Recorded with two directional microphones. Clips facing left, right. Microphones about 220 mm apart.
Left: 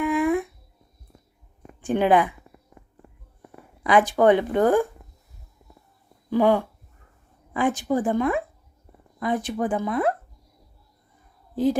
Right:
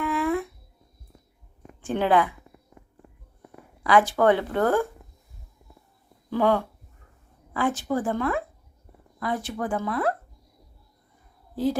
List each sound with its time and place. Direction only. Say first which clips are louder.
0.0 s a sound: left 4 dB; 15° left (ahead or behind)
1.8 s speech: left 3 dB; 15° left (ahead or behind)
3.8 s speech: left 2 dB; 20° left (ahead or behind)
6.3 s speech: left 3 dB; 15° left (ahead or behind)
11.5 s speech: left 3 dB; 20° left (ahead or behind)